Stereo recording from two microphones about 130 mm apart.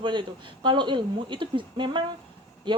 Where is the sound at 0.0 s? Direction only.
35° right (ahead or behind).